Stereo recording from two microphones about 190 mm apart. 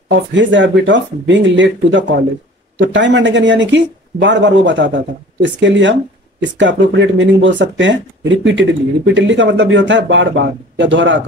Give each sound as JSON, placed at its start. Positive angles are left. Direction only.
{"t": 0.1, "sound": "speech", "side_deg": -75}